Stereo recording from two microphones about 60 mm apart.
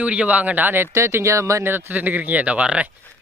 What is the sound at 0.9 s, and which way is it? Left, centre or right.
Speech, right.